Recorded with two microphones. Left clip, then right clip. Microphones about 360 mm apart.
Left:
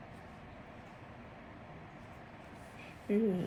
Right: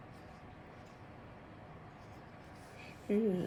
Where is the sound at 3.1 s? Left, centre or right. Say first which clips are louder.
Left 1 dB; centre.